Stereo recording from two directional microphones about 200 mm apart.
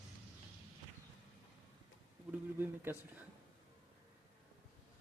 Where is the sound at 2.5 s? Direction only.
10° right (ahead or behind).